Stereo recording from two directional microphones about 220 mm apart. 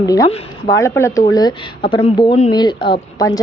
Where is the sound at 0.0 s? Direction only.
15° left (ahead or behind).